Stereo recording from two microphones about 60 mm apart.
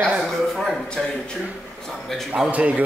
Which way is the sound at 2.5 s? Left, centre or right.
Right.